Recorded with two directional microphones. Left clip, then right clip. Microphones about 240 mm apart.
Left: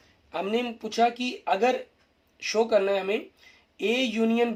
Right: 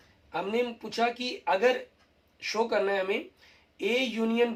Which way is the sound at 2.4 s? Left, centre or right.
Left.